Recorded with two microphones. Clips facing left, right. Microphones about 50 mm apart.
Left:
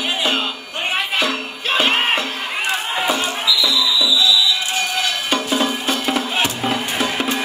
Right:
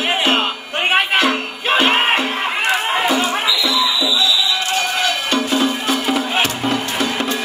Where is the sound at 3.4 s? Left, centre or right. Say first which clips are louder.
Right 1 dB; right.